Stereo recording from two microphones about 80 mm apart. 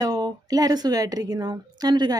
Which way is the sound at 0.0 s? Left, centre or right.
Right.